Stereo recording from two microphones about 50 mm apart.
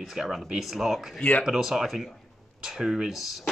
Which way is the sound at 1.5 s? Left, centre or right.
Centre.